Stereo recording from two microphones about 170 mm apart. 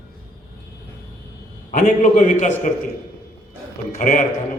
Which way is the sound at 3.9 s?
50° left (ahead or behind).